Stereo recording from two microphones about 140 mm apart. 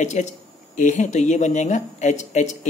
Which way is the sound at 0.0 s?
60° left (ahead or behind).